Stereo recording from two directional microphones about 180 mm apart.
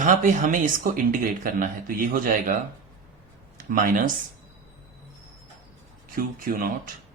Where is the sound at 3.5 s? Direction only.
50° right (ahead or behind).